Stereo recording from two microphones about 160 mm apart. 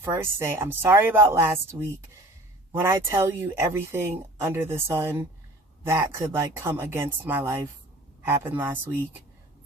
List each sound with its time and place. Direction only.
0.0 s speech: 15° right (ahead or behind)
2.7 s speech: 15° right (ahead or behind)